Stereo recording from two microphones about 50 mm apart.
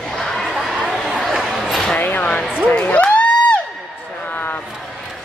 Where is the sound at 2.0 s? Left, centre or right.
Left.